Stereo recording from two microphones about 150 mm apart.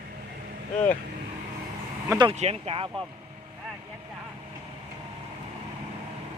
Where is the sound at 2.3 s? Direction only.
45° right (ahead or behind).